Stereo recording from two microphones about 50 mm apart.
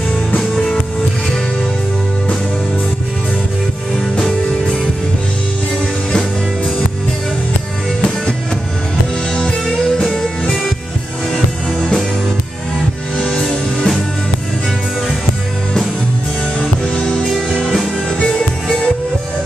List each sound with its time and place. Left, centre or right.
0.4 s music: centre
9.3 s music: centre
13.2 s music: centre
16.5 s music: left
18.2 s music: centre